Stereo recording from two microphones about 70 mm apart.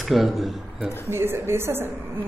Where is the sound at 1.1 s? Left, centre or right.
Right.